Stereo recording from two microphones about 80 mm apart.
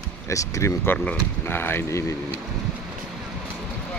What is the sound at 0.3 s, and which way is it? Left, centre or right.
Speech, left.